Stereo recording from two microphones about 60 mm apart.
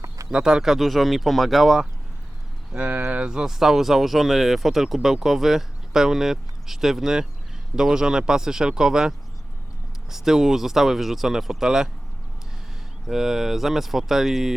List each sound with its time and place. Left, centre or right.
0.3 s speech: centre
2.7 s speech: right
13.1 s speech: centre